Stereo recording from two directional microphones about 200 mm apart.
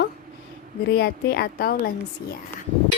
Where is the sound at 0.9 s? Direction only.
55° left (ahead or behind).